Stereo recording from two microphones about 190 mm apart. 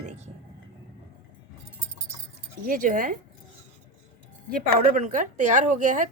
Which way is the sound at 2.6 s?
45° right (ahead or behind).